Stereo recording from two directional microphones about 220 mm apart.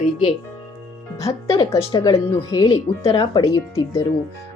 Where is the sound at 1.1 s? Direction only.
15° left (ahead or behind).